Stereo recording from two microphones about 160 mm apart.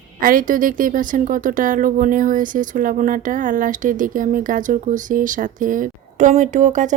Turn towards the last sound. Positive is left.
turn(degrees=-50)  # may be behind; listen again after turning